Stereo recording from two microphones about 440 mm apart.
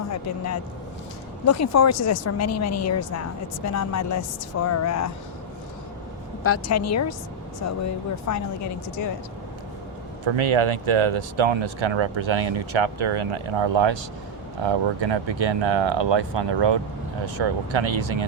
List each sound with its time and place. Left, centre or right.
0.1 s speech: left
6.4 s speech: left
10.2 s speech: right
17.2 s speech: right